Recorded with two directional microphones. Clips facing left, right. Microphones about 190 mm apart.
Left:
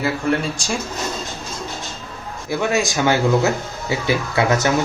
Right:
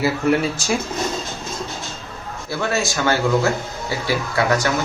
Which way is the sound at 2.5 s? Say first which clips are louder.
Left 3 dB; 15° left (ahead or behind).